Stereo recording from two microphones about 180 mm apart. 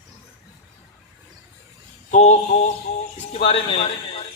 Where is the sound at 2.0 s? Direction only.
40° left (ahead or behind).